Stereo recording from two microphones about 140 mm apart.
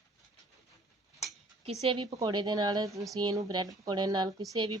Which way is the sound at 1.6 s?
45° right (ahead or behind).